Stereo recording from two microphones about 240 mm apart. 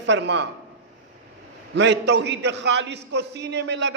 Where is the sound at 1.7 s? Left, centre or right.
Right.